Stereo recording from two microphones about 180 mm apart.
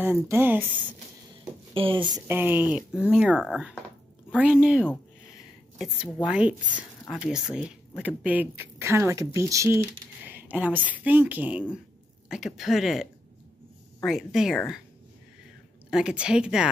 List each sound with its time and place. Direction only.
0.0 s speech: 10° right (ahead or behind)
1.7 s speech: 30° right (ahead or behind)
2.2 s speech: 10° right (ahead or behind)
6.2 s speech: 5° right (ahead or behind)
15.9 s speech: 5° right (ahead or behind)